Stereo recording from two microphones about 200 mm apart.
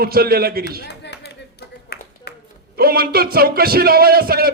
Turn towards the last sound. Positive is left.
turn(degrees=-50)  # may be behind; listen again after turning